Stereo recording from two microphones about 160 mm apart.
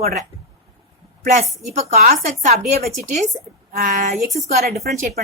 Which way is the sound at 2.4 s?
50° right (ahead or behind).